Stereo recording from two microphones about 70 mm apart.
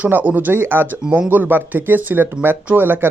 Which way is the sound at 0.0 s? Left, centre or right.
Right.